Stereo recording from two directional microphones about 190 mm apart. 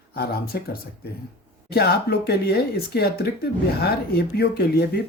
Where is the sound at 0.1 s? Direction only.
55° left (ahead or behind).